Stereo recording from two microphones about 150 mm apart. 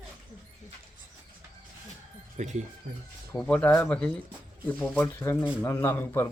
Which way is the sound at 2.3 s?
50° right (ahead or behind).